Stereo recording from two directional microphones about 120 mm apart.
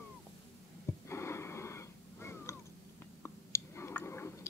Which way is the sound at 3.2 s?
20° left (ahead or behind).